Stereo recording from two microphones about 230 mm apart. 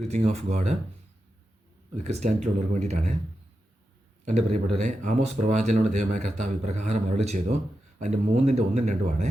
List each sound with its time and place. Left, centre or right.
0.0 s speech: right
2.0 s speech: right
4.3 s speech: right